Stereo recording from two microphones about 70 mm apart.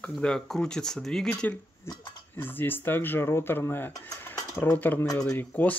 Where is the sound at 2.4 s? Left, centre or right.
Left.